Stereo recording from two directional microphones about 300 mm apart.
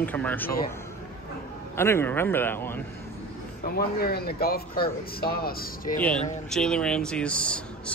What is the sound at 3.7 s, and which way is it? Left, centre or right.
Speech, left.